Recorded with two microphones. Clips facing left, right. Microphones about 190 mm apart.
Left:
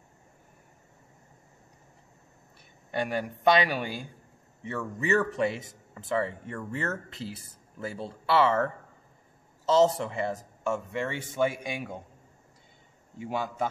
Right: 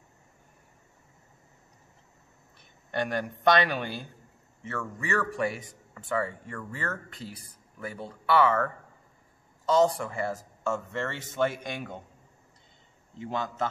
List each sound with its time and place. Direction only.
2.9 s a man's voice: 10° left (ahead or behind)
13.2 s speech: 10° left (ahead or behind)